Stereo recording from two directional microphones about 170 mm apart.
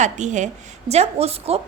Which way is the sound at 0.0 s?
45° right (ahead or behind).